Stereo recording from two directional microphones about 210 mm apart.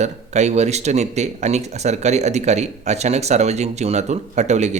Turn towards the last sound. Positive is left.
turn(degrees=-35)  # may be behind; listen again after turning